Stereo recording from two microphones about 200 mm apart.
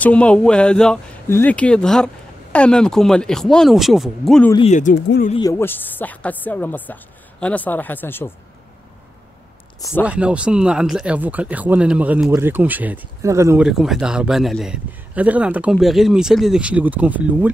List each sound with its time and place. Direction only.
0.0 s a man's voice: 5° left (ahead or behind)
4.6 s speech: 35° left (ahead or behind)
5.4 s speech: 15° left (ahead or behind)
10.0 s speech: 5° right (ahead or behind)
13.7 s a man's voice: centre (ahead or behind)